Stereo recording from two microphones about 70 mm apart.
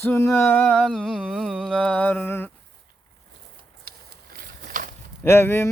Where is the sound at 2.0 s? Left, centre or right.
Left.